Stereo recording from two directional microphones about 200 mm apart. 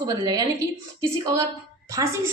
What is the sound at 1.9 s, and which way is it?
Speech, 15° right (ahead or behind).